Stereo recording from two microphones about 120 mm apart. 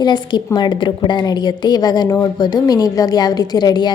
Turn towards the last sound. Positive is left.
turn(degrees=35)  # may be behind; listen again after turning